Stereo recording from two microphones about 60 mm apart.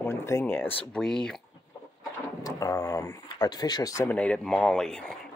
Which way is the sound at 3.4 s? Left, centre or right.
Left.